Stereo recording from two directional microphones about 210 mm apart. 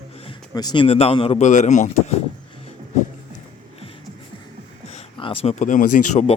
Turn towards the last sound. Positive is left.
turn(degrees=35)  # may be behind; listen again after turning